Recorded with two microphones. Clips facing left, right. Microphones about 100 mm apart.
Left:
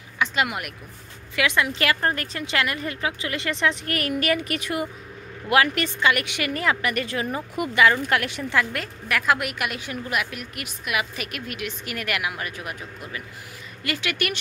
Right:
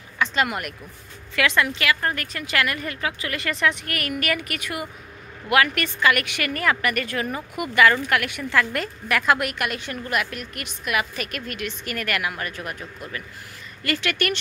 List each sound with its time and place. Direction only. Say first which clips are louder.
0.2 s a woman's voice: right 1 dB; 10° left (ahead or behind)
1.8 s speech: left 1 dB; 35° left (ahead or behind)
8.7 s a woman's voice: right 3 dB; centre (ahead or behind)